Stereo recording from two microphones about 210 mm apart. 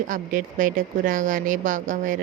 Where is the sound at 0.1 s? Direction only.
40° right (ahead or behind).